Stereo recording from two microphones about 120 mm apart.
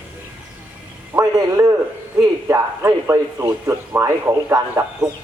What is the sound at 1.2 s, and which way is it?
Radio, 25° right (ahead or behind).